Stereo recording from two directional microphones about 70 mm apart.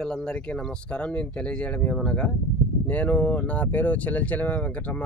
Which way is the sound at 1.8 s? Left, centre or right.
Centre.